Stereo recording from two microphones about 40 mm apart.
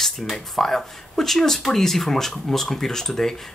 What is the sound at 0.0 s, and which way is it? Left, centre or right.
Speech, centre.